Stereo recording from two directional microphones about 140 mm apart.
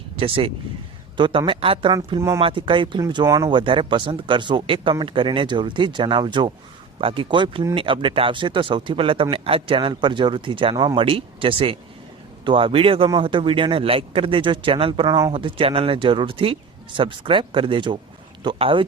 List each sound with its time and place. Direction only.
0.2 s speech: 40° right (ahead or behind)